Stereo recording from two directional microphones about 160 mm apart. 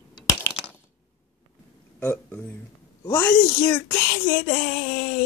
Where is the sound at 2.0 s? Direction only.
15° left (ahead or behind).